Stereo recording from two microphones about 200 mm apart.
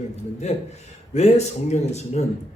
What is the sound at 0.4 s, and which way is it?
A man's voice, 35° left (ahead or behind).